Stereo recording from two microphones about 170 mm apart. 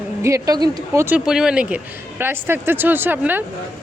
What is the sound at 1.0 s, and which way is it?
Speech, 5° right (ahead or behind).